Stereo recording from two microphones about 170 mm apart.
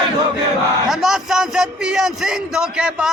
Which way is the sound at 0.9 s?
Centre (ahead or behind).